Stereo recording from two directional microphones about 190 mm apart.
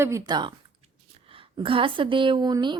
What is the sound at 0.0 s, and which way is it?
Speech, 20° right (ahead or behind).